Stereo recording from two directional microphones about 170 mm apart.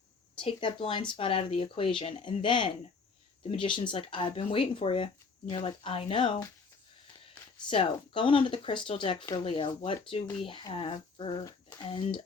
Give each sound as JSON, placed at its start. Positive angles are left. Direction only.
{"t": 0.3, "sound": "speech", "side_deg": 30}
{"t": 7.7, "sound": "speech", "side_deg": 30}